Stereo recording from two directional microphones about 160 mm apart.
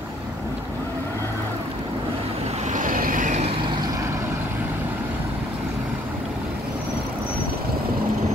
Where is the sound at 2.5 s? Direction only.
50° right (ahead or behind).